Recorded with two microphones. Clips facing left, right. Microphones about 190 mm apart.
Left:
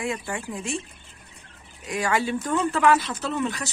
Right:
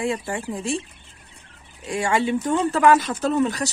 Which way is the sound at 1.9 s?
25° right (ahead or behind).